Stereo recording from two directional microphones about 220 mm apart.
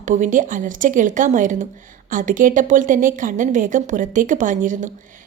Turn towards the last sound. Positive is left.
turn(degrees=-35)  # may be behind; listen again after turning